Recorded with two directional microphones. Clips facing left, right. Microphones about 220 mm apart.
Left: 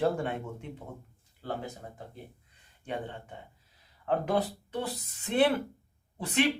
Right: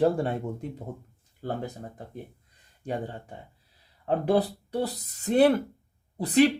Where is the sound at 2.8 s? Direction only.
40° right (ahead or behind).